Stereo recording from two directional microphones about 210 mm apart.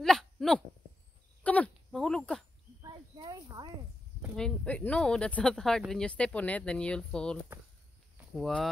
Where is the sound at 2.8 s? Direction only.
15° right (ahead or behind).